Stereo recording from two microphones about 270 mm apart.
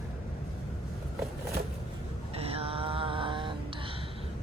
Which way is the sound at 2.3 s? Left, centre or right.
Right.